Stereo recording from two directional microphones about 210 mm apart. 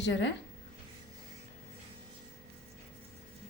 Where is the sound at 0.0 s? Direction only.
55° left (ahead or behind).